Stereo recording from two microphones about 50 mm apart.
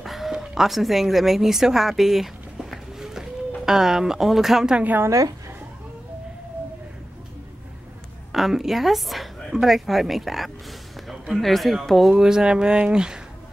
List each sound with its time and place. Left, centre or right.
0.0 s a sound: centre
0.3 s a woman's voice: centre
8.3 s a woman's voice: centre
12.1 s speech: centre